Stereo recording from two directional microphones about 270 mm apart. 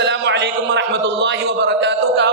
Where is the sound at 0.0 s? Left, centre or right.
Right.